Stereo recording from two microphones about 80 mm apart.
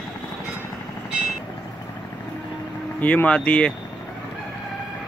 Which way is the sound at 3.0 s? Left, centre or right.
Centre.